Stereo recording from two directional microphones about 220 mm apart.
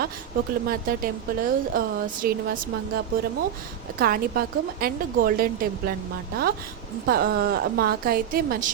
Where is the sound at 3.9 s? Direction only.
40° right (ahead or behind).